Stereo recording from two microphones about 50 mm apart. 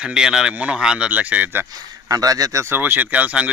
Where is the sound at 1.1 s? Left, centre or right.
Right.